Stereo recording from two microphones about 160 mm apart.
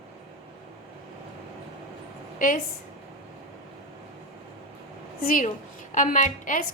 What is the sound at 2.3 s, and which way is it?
Speech, 60° left (ahead or behind).